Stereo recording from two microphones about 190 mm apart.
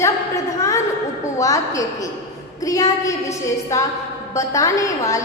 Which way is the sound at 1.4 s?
15° left (ahead or behind).